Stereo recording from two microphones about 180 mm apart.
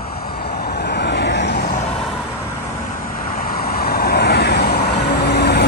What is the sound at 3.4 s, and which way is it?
Vehicle, 55° left (ahead or behind).